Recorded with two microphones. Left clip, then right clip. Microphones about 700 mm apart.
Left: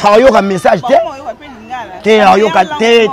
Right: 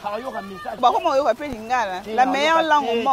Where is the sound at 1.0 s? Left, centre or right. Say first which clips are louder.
Right 3 dB; right.